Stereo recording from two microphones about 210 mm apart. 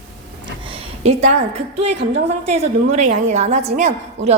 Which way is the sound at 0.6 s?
30° right (ahead or behind).